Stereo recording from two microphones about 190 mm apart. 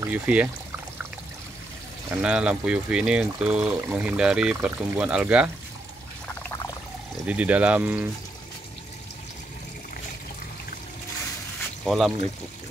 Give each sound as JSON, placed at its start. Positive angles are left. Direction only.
{"t": 0.0, "sound": "speech", "side_deg": -10}
{"t": 2.0, "sound": "speech", "side_deg": -5}
{"t": 6.2, "sound": "pour", "side_deg": 15}
{"t": 7.2, "sound": "speech", "side_deg": -5}
{"t": 11.8, "sound": "speech", "side_deg": 0}